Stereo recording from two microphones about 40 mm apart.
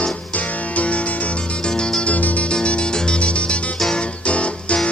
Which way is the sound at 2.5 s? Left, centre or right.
Left.